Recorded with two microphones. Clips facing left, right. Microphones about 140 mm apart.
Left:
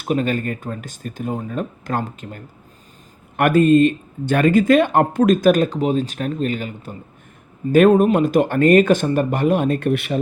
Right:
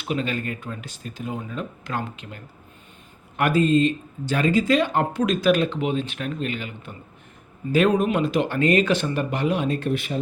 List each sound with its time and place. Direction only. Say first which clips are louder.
0.0 s speech: left 6 dB; 45° left (ahead or behind)
3.3 s speech: left 6 dB; 55° left (ahead or behind); by 6.9 s 40° left (ahead or behind)
7.7 s speech: left 7 dB; 50° left (ahead or behind)